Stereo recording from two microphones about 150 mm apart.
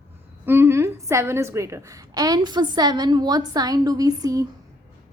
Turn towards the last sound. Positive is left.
turn(degrees=-25)  # may be behind; listen again after turning